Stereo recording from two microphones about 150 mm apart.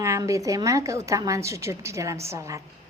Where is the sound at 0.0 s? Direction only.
20° right (ahead or behind).